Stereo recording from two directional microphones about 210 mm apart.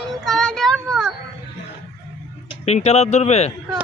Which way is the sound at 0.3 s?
Centre (ahead or behind).